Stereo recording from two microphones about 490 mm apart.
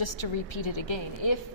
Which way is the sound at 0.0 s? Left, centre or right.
Left.